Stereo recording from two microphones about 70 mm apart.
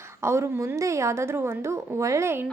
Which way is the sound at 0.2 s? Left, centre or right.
Right.